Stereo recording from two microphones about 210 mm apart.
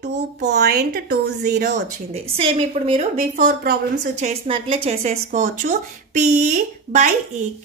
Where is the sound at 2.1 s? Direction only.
30° right (ahead or behind).